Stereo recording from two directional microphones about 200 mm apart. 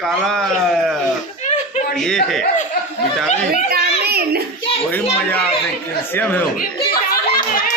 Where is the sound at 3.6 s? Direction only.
50° right (ahead or behind).